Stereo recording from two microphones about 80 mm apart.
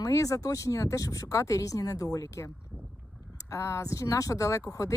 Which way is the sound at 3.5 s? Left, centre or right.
Left.